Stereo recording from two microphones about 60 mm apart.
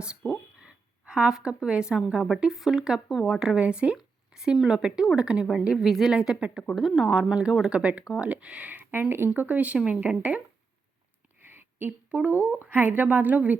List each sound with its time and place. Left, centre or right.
0.6 s a sound: centre
2.0 s speech: centre
3.4 s speech: centre
4.3 s a sound: centre
4.5 s speech: centre
4.8 s speech: centre
7.7 s speech: right
8.9 s speech: right
9.3 s speech: right
11.3 s a woman's voice: right